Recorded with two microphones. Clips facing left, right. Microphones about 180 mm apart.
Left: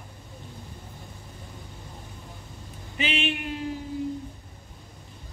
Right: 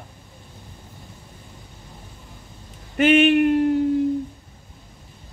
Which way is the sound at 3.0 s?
60° right (ahead or behind).